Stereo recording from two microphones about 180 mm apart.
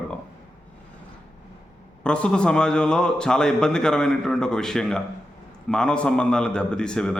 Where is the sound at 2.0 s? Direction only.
5° left (ahead or behind).